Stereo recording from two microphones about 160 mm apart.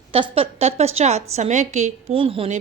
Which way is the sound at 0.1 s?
35° right (ahead or behind).